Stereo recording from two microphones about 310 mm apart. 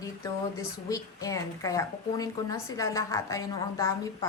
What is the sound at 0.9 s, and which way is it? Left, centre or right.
Speech, centre.